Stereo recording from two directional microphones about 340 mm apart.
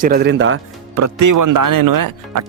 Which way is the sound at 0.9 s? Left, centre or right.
Right.